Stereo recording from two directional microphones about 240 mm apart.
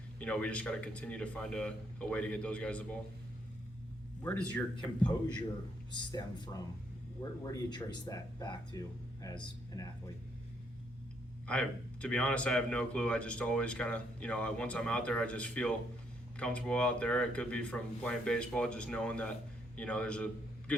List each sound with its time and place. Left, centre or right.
0.2 s speech: centre
4.2 s speech: centre
5.9 s speech: centre
11.4 s a man's voice: centre